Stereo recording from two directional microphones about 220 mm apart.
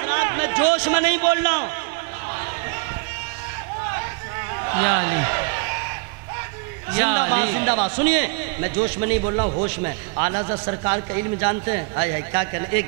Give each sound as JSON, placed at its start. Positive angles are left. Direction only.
{"t": 0.0, "sound": "a man's voice", "side_deg": -15}
{"t": 4.6, "sound": "a sound", "side_deg": -15}
{"t": 6.9, "sound": "a man's voice", "side_deg": -15}